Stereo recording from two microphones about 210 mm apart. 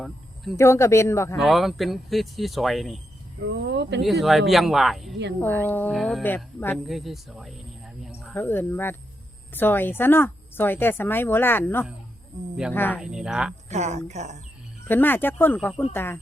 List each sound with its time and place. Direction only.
0.5 s a woman's voice: 15° left (ahead or behind)
1.4 s speech: centre (ahead or behind)
3.4 s speech: 55° right (ahead or behind)
4.0 s a woman's voice: centre (ahead or behind)
13.0 s speech: 5° right (ahead or behind)
13.7 s speech: 35° right (ahead or behind)
14.8 s a woman's voice: 10° left (ahead or behind)